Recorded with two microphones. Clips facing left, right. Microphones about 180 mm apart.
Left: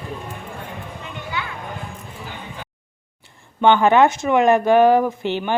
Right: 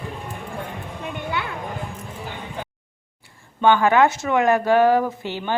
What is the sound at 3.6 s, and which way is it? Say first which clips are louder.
Speech: left 2 dB; 20° left (ahead or behind).